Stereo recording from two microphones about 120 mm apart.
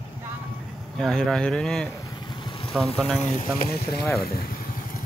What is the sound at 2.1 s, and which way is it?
Vehicle, 40° left (ahead or behind).